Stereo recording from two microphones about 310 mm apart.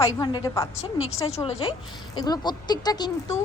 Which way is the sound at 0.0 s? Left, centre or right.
Centre.